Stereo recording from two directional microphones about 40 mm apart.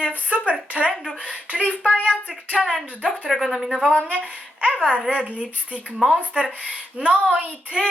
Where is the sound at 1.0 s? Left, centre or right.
Right.